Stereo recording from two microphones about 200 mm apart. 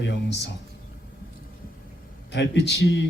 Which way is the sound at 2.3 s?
60° left (ahead or behind).